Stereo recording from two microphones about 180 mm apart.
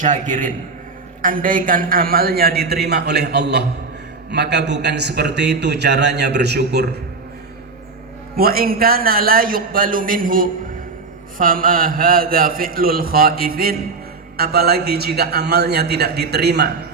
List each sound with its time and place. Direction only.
0.0 s a man's voice: 45° right (ahead or behind); by 7.0 s 65° right (ahead or behind)
8.4 s a man's voice: 55° right (ahead or behind)